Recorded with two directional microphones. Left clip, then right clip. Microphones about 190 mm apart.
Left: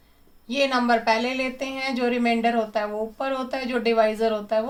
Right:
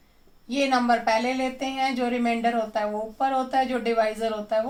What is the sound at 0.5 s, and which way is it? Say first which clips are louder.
Speech: left 1 dB; 30° left (ahead or behind).